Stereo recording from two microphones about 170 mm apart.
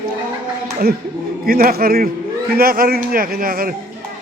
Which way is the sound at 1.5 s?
65° right (ahead or behind).